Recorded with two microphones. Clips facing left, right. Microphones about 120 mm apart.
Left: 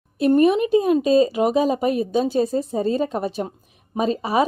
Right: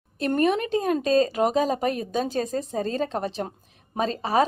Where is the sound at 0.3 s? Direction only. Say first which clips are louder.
Left 5 dB; 45° right (ahead or behind).